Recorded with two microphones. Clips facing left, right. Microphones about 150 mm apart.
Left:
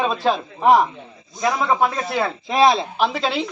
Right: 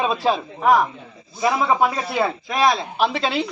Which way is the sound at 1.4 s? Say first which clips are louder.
Right 1 dB; 5° right (ahead or behind).